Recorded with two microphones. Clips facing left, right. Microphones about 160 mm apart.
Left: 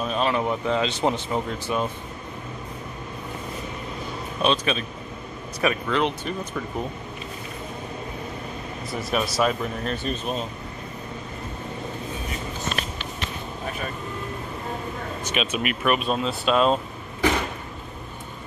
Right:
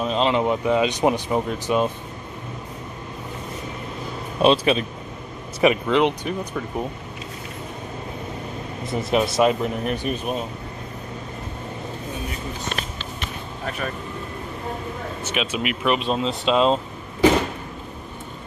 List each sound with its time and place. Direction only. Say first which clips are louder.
0.0 s speech: right 3 dB; 20° right (ahead or behind)
4.4 s speech: right 6 dB; 30° right (ahead or behind)
5.6 s speech: right 5 dB; 20° right (ahead or behind)
8.9 s a man's voice: right 5 dB; 20° right (ahead or behind)
15.3 s a man's voice: right 1 dB; 10° right (ahead or behind)